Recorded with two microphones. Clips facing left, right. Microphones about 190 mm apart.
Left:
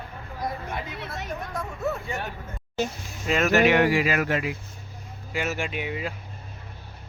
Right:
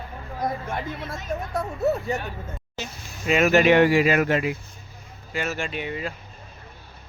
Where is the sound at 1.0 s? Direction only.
70° left (ahead or behind).